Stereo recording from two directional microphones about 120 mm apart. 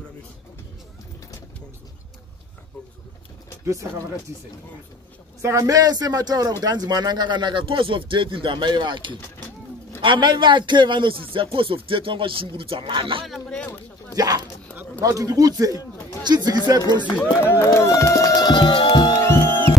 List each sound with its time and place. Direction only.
5.4 s speech: 25° right (ahead or behind); by 13.3 s 45° right (ahead or behind)
13.3 s speech: 5° left (ahead or behind)
14.1 s dog: 30° right (ahead or behind)
15.0 s speech: 30° right (ahead or behind)
15.7 s a sound: 30° left (ahead or behind)
16.2 s speech: 35° right (ahead or behind)
17.2 s speech: 20° left (ahead or behind)
17.6 s music: 25° left (ahead or behind); by 19.1 s 40° left (ahead or behind)
19.1 s music: 25° left (ahead or behind)